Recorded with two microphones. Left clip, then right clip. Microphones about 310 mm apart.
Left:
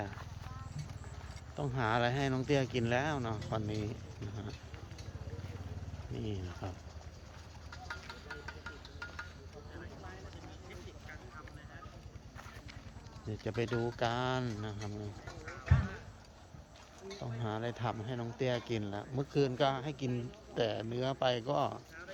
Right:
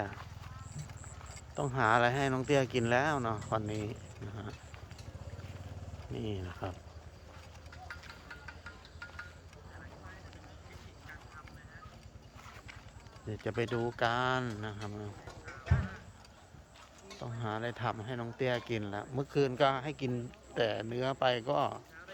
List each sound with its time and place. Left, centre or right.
1.5 s speech: centre
6.1 s speech: centre
7.9 s music: left
13.3 s speech: centre
15.7 s clip-clop: right
17.2 s speech: centre